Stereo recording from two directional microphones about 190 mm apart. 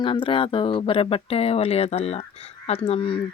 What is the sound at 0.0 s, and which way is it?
Speech, 25° left (ahead or behind).